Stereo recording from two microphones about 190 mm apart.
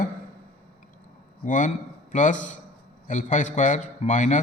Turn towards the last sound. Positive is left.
turn(degrees=40)  # may be behind; listen again after turning